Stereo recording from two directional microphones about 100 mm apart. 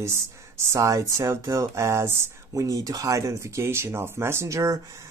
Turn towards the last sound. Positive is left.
turn(degrees=-30)  # may be behind; listen again after turning